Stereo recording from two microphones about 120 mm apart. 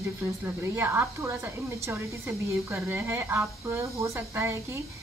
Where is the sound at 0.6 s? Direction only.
15° right (ahead or behind).